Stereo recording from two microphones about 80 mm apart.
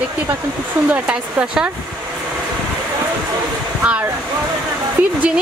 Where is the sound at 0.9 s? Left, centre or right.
Centre.